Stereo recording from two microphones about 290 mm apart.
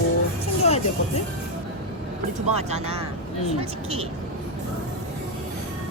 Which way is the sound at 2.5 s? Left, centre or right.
Right.